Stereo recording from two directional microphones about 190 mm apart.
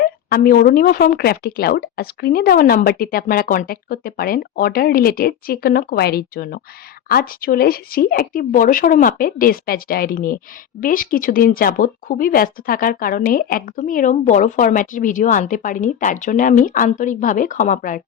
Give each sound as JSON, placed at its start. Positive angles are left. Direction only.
{"t": 0.0, "sound": "speech", "side_deg": 50}